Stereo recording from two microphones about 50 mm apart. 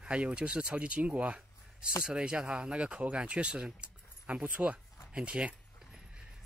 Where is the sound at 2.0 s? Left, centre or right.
Centre.